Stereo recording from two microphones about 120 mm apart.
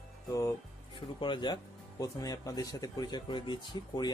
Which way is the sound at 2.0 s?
30° left (ahead or behind).